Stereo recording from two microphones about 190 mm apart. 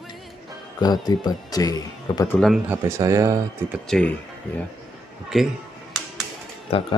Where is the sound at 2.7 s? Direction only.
15° right (ahead or behind).